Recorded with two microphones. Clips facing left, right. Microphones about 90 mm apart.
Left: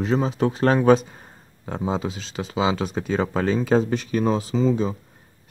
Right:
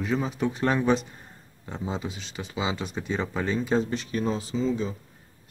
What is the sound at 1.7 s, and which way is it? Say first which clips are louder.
Speech: left 7 dB; 90° left.